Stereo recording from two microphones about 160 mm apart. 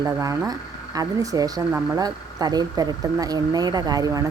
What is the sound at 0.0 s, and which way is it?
Speech, 20° right (ahead or behind).